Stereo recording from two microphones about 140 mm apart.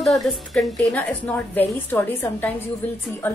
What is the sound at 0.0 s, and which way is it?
A woman's voice, centre (ahead or behind).